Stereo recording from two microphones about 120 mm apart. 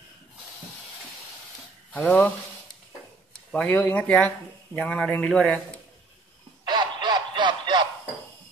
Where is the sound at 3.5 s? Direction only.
15° left (ahead or behind).